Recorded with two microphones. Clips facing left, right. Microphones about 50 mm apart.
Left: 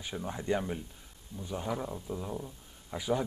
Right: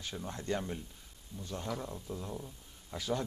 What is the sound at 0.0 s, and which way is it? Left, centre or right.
Speech, centre.